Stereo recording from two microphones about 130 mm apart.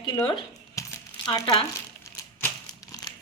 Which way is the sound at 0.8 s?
30° left (ahead or behind).